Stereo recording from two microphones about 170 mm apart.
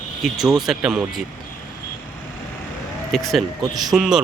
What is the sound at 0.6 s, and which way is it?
Speech, 5° right (ahead or behind).